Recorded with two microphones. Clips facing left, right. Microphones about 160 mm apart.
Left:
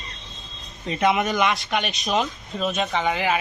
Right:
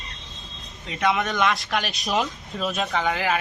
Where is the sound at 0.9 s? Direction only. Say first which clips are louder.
Left 2 dB; 20° left (ahead or behind).